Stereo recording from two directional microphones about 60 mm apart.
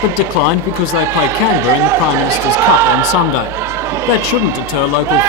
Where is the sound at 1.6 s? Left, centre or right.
Right.